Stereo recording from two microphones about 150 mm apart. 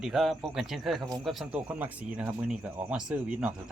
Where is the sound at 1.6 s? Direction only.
10° right (ahead or behind).